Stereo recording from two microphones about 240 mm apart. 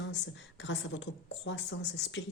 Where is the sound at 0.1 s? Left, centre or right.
Left.